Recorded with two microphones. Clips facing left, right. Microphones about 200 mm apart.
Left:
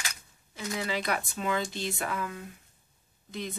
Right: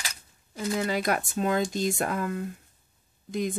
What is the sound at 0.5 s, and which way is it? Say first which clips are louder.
Speech: right 5 dB; 45° right (ahead or behind).